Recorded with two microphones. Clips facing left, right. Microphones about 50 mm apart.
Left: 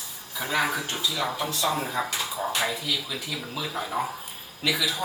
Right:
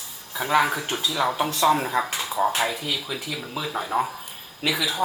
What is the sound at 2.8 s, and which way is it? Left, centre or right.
Speech, right.